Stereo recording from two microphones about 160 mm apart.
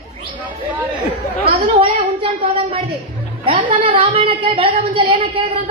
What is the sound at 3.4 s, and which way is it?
A woman's voice, 35° right (ahead or behind).